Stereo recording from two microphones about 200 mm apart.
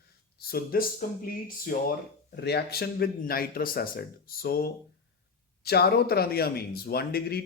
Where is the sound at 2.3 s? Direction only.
55° left (ahead or behind).